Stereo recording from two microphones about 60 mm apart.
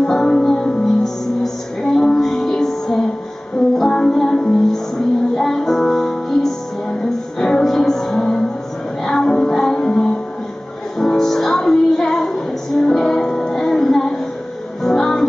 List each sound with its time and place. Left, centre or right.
0.0 s music: centre